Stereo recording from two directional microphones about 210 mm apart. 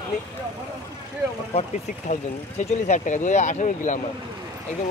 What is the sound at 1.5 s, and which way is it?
Speech, 30° left (ahead or behind).